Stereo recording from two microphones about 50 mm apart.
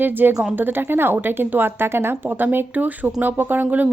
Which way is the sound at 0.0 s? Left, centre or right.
Right.